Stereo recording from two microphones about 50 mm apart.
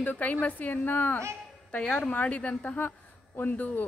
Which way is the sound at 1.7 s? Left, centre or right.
Left.